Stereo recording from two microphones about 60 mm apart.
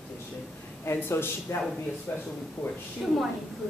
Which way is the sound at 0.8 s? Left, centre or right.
Left.